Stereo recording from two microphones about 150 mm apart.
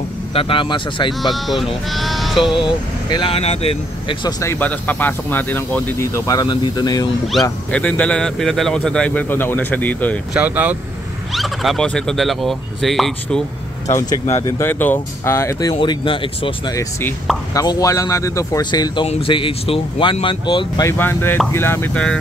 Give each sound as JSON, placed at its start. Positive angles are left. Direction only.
{"t": 0.3, "sound": "speech", "side_deg": 35}
{"t": 1.3, "sound": "speech", "side_deg": 0}
{"t": 2.6, "sound": "speech", "side_deg": 35}
{"t": 4.4, "sound": "speech", "side_deg": 15}
{"t": 7.7, "sound": "speech", "side_deg": 10}
{"t": 10.3, "sound": "speech", "side_deg": -10}
{"t": 11.3, "sound": "speech", "side_deg": 0}
{"t": 13.9, "sound": "speech", "side_deg": 25}
{"t": 15.8, "sound": "speech", "side_deg": 35}
{"t": 17.6, "sound": "speech", "side_deg": 25}
{"t": 21.0, "sound": "speech", "side_deg": 15}